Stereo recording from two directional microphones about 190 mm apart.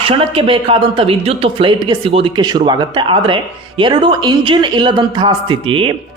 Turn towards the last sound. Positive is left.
turn(degrees=-25)  # may be behind; listen again after turning